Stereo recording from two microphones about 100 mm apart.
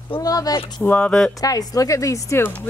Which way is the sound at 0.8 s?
15° left (ahead or behind).